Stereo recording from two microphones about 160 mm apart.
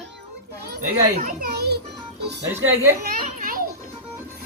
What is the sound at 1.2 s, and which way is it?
Speech, 75° right (ahead or behind).